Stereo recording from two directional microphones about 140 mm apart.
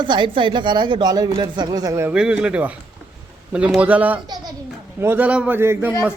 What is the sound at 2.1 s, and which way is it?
Speech, 5° right (ahead or behind).